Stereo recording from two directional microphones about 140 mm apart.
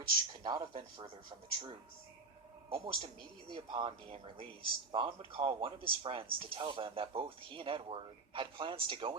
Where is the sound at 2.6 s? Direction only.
40° right (ahead or behind).